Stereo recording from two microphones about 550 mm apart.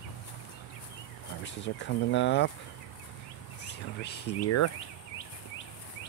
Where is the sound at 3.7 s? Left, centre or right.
Centre.